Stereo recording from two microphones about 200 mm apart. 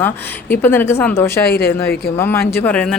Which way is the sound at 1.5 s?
50° left (ahead or behind).